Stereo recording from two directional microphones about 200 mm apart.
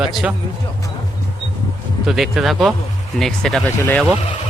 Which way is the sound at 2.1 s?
Centre (ahead or behind).